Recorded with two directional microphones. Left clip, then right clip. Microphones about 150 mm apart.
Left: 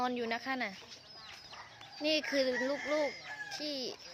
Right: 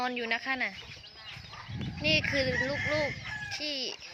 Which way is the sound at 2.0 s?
15° left (ahead or behind).